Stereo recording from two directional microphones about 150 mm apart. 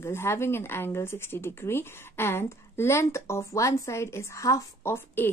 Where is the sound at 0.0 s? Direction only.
15° left (ahead or behind).